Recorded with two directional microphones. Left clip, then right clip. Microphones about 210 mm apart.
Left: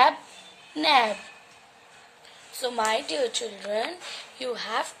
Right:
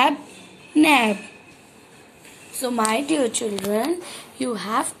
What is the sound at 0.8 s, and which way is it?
Speech, 10° right (ahead or behind).